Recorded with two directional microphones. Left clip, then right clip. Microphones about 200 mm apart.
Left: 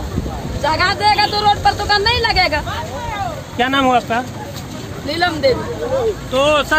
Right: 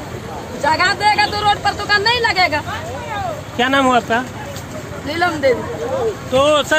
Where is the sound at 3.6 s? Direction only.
50° right (ahead or behind).